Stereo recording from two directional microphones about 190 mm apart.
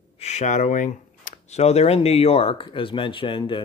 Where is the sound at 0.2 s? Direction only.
40° left (ahead or behind).